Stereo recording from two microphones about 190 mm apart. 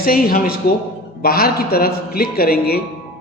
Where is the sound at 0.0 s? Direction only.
50° left (ahead or behind).